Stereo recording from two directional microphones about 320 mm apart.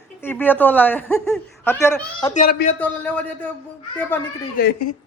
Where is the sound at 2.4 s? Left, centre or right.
Left.